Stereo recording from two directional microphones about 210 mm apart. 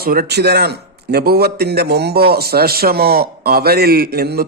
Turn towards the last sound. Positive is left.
turn(degrees=-50)  # may be behind; listen again after turning